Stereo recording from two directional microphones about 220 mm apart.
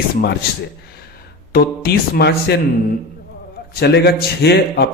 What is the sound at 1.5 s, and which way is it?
Speech, 45° left (ahead or behind).